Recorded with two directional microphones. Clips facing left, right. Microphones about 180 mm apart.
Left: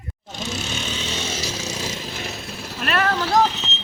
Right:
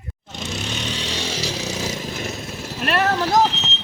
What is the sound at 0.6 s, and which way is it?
Vehicle, 10° left (ahead or behind).